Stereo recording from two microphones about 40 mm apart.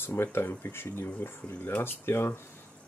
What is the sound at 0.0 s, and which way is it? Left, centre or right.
Speech, left.